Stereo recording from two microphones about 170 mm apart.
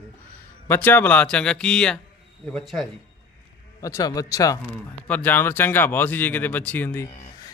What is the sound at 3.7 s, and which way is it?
Speech, 20° left (ahead or behind).